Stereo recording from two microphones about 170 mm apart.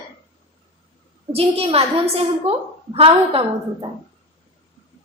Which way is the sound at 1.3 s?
35° right (ahead or behind).